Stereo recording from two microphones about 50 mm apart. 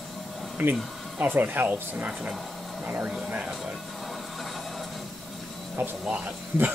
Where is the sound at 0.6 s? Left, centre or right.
Right.